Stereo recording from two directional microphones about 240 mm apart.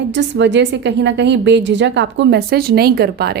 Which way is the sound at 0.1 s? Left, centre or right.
Right.